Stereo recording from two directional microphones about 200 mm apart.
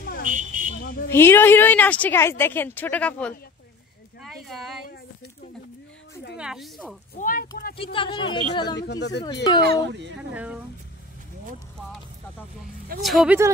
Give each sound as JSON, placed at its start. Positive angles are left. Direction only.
{"t": 0.3, "sound": "a sound", "side_deg": -40}
{"t": 0.8, "sound": "a sound", "side_deg": 55}
{"t": 1.1, "sound": "a woman's voice", "side_deg": 10}
{"t": 4.2, "sound": "a sound", "side_deg": 0}
{"t": 6.3, "sound": "speech", "side_deg": -5}
{"t": 7.2, "sound": "speech", "side_deg": 45}
{"t": 7.7, "sound": "speech", "side_deg": 25}
{"t": 8.8, "sound": "speech", "side_deg": 60}
{"t": 9.2, "sound": "speech", "side_deg": 20}
{"t": 9.8, "sound": "speech", "side_deg": -60}
{"t": 10.3, "sound": "speech", "side_deg": -5}
{"t": 13.0, "sound": "speech", "side_deg": 0}